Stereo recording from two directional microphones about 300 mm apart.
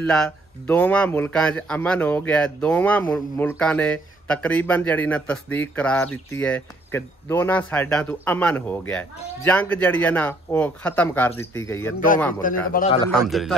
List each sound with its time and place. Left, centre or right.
0.0 s a man's voice: centre
12.7 s a man's voice: centre
13.1 s a man's voice: centre